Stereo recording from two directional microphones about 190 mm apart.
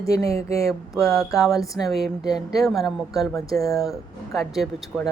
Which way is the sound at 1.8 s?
Centre (ahead or behind).